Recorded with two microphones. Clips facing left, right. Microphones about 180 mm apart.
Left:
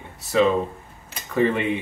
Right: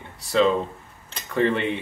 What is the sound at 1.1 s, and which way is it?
Tick-tock, 10° left (ahead or behind).